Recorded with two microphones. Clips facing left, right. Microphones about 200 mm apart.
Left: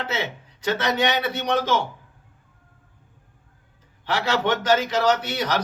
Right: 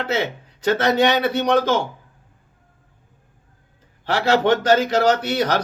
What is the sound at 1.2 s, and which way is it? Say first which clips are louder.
Speech: right 7 dB; 30° right (ahead or behind).